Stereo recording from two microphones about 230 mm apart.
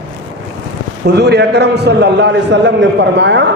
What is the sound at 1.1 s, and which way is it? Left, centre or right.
A man's voice, right.